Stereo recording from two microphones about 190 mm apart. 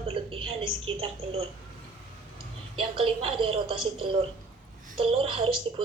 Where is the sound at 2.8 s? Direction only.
30° right (ahead or behind).